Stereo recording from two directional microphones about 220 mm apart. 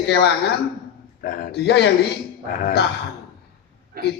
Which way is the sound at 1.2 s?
40° left (ahead or behind).